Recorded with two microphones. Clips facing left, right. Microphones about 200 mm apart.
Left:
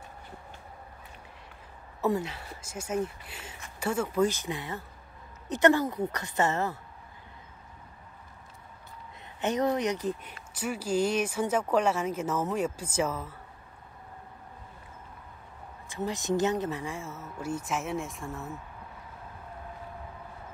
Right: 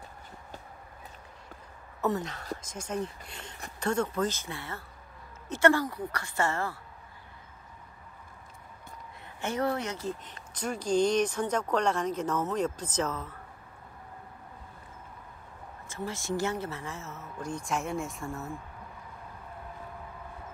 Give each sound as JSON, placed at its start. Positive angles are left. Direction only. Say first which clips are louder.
{"t": 2.0, "sound": "a woman's voice", "louder": "left 2 dB", "side_deg": 10}
{"t": 9.4, "sound": "speech", "louder": "left 3 dB", "side_deg": 20}
{"t": 15.9, "sound": "speech", "louder": "left 4 dB", "side_deg": 20}